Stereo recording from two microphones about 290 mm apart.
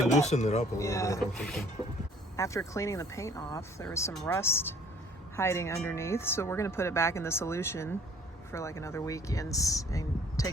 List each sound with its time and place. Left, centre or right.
0.2 s speech: left
0.8 s speech: centre